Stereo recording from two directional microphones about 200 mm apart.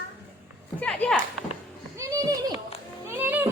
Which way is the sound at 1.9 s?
15° right (ahead or behind).